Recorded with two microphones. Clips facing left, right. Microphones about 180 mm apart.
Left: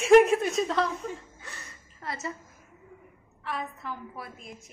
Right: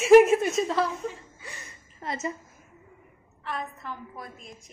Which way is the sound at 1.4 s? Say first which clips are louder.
Right 1 dB; 15° right (ahead or behind).